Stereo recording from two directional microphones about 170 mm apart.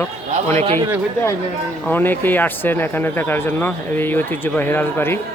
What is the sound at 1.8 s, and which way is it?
Speech, 10° left (ahead or behind).